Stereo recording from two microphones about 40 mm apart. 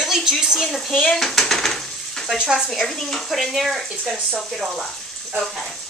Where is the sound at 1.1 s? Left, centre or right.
Centre.